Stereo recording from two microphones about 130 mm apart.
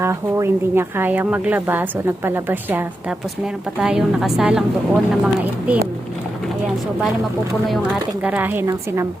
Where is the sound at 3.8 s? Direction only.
5° right (ahead or behind).